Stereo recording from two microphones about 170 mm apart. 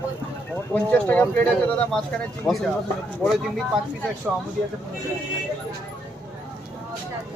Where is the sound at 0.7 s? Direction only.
10° left (ahead or behind).